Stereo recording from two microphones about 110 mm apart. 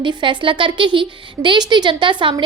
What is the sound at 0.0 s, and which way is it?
A woman's voice, 45° right (ahead or behind).